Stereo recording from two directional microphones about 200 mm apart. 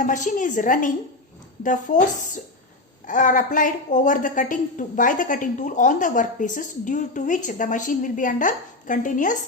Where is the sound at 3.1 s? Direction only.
40° left (ahead or behind).